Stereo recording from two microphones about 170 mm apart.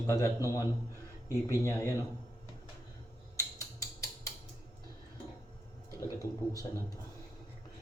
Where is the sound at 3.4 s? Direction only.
20° left (ahead or behind).